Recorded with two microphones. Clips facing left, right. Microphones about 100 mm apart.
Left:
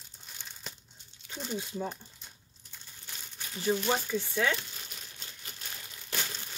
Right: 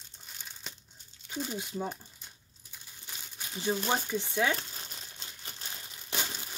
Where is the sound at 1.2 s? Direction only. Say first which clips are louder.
Right 1 dB; 5° right (ahead or behind).